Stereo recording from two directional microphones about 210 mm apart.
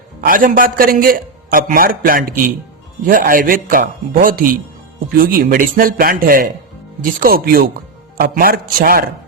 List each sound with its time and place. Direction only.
0.2 s a man's voice: 40° right (ahead or behind)